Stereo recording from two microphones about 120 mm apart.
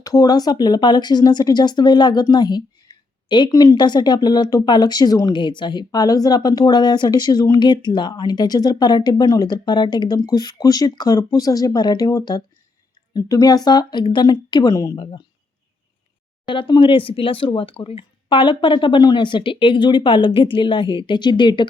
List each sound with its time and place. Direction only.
0.0 s speech: 30° left (ahead or behind)
14.9 s speech: 45° left (ahead or behind)
16.5 s speech: 40° left (ahead or behind)